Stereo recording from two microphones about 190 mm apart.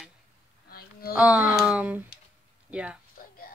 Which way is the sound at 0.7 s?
55° left (ahead or behind).